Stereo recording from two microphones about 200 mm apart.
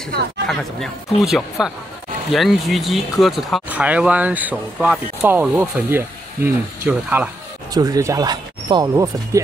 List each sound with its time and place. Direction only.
0.5 s speech: centre (ahead or behind); by 9.4 s 15° right (ahead or behind)